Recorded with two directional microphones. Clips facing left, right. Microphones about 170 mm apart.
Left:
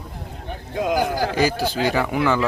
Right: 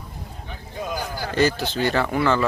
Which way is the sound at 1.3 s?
10° left (ahead or behind).